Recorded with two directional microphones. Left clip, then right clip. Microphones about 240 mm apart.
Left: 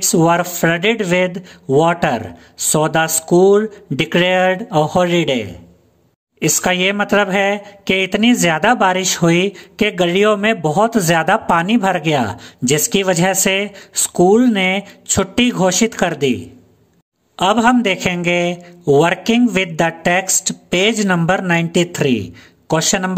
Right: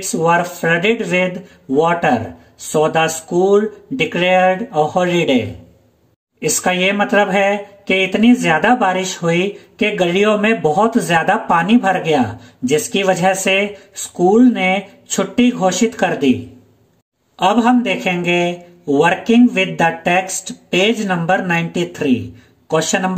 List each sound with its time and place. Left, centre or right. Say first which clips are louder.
0.0 s speech: left 1 dB; left
17.4 s speech: left 1 dB; left